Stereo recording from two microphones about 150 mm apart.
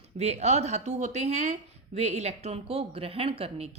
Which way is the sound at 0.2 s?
45° right (ahead or behind).